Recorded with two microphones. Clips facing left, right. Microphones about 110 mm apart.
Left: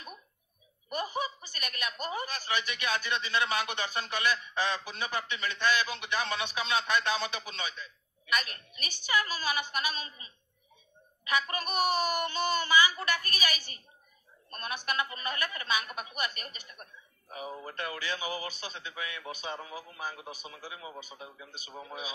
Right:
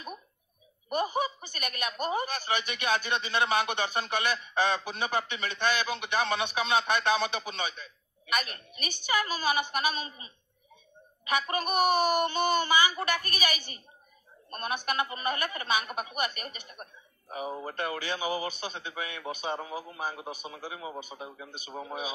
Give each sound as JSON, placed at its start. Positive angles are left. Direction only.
{"t": 0.8, "sound": "a woman's voice", "side_deg": -20}
{"t": 21.5, "sound": "speech", "side_deg": -20}